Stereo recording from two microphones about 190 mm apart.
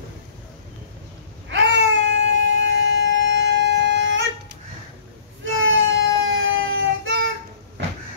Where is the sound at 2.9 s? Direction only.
80° right.